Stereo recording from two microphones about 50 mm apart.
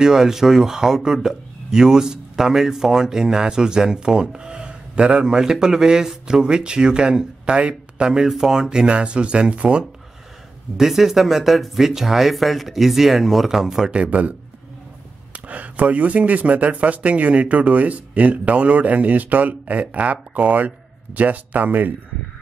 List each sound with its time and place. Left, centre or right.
0.0 s speech: centre
10.8 s speech: centre
13.9 s speech: right
15.3 s speech: right